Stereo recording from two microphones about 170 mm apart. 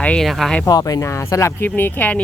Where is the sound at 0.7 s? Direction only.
20° left (ahead or behind).